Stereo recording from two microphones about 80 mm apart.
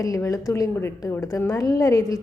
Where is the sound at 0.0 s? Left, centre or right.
Left.